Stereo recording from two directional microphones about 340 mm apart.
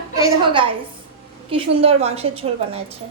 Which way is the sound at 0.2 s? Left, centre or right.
Centre.